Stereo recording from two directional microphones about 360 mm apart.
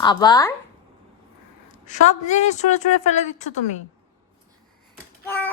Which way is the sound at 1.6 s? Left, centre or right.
Centre.